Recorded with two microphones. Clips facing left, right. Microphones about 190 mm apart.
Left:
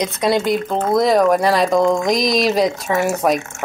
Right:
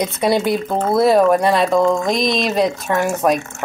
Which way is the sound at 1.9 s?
15° left (ahead or behind).